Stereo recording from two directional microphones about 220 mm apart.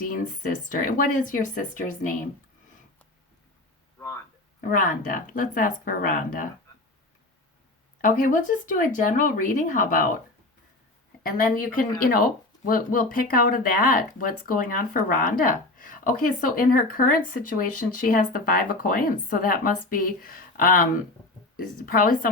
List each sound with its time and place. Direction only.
0.0 s speech: 40° left (ahead or behind)
4.6 s speech: 40° left (ahead or behind)
8.0 s speech: 35° left (ahead or behind)
11.2 s speech: 40° left (ahead or behind)